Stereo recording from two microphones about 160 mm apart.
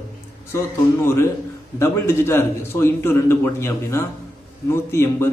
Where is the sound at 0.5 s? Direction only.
15° left (ahead or behind).